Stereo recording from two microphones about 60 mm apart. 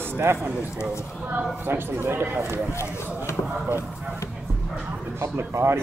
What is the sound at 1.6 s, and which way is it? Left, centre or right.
Speech, right.